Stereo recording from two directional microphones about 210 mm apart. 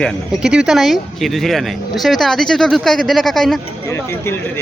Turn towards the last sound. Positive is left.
turn(degrees=10)  # may be behind; listen again after turning